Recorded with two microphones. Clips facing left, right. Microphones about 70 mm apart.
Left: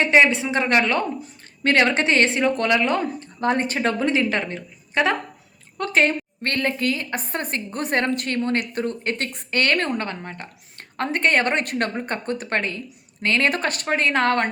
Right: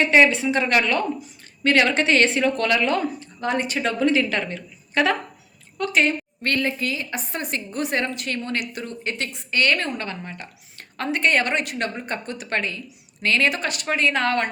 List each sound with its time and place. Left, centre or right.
0.1 s a woman's voice: left
3.2 s speech: left